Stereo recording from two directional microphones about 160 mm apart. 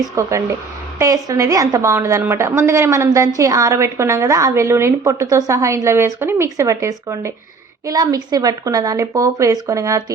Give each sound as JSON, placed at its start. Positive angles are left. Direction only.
{"t": 0.2, "sound": "a woman's voice", "side_deg": -20}